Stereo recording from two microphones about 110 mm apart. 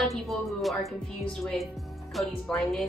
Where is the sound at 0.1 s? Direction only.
Centre (ahead or behind).